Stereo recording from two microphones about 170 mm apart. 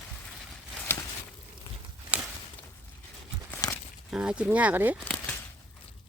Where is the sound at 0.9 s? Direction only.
10° left (ahead or behind).